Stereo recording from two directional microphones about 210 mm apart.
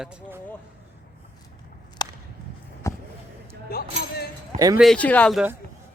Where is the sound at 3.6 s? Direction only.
45° left (ahead or behind).